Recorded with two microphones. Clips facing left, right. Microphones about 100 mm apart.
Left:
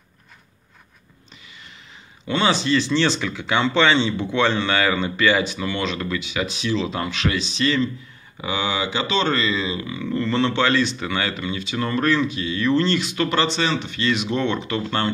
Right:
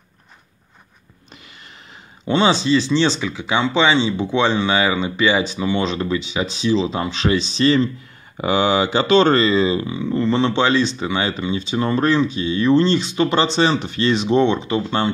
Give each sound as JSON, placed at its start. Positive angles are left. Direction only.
{"t": 2.2, "sound": "speech", "side_deg": -20}
{"t": 9.8, "sound": "speech", "side_deg": -20}
{"t": 13.8, "sound": "speech", "side_deg": -35}